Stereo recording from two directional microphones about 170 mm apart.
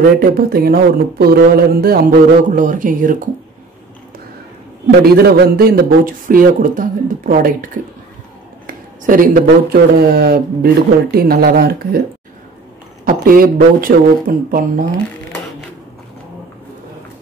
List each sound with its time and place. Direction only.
0.2 s speech: 60° right (ahead or behind)
2.5 s speech: 50° right (ahead or behind)
5.1 s speech: 65° right (ahead or behind)
13.0 s speech: 55° right (ahead or behind)